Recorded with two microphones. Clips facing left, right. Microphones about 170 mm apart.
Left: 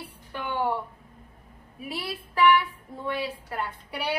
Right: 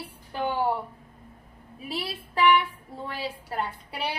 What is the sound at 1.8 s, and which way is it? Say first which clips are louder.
A woman's voice: right 1 dB; 30° right (ahead or behind).